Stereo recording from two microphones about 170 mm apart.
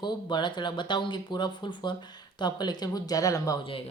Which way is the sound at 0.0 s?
25° left (ahead or behind).